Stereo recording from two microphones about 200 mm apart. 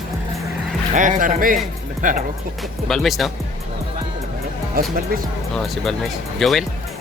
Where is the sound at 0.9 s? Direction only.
40° right (ahead or behind).